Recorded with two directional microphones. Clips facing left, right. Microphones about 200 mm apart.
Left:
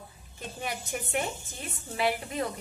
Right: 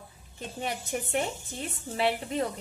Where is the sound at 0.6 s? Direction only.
30° right (ahead or behind).